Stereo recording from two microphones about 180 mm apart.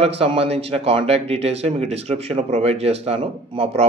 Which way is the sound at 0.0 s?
35° right (ahead or behind).